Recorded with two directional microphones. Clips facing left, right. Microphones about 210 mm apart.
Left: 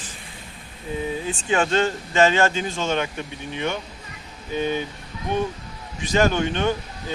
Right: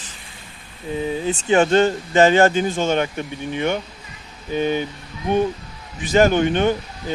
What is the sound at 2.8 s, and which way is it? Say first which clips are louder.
Speech: right 3 dB; 50° right (ahead or behind).